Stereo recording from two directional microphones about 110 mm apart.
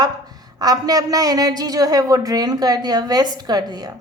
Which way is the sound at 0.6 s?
35° right (ahead or behind).